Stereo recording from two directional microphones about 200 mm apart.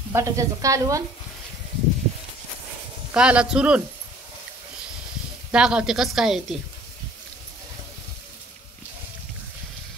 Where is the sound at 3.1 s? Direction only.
5° right (ahead or behind).